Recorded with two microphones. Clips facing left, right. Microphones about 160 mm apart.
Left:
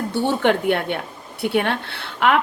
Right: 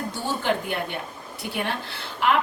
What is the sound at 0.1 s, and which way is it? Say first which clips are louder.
A woman's voice: left 8 dB; 65° left (ahead or behind).